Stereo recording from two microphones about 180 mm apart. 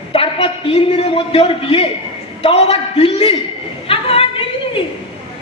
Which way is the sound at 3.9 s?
30° left (ahead or behind).